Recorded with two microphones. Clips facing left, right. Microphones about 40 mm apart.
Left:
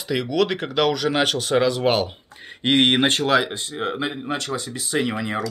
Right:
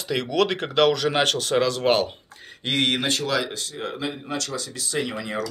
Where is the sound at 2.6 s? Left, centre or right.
Left.